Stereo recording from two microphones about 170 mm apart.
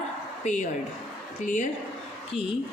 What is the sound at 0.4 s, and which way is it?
A woman's voice, 45° left (ahead or behind).